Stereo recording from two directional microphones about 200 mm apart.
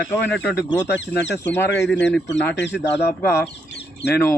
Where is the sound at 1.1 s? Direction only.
60° left (ahead or behind).